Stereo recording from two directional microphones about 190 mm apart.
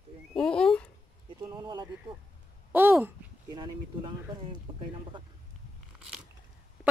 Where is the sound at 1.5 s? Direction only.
20° right (ahead or behind).